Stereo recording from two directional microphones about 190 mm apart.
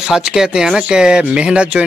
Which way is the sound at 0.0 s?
5° right (ahead or behind).